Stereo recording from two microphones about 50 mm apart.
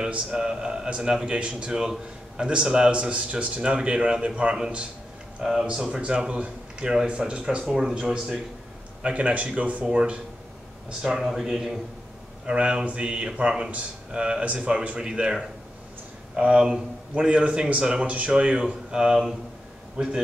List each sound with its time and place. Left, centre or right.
0.3 s a man's voice: centre
5.4 s a man's voice: centre
7.6 s a man's voice: centre
9.0 s a man's voice: right
11.0 s a man's voice: centre